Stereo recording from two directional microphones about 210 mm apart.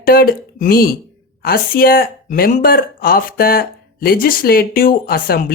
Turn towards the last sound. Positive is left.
turn(degrees=45)  # may be behind; listen again after turning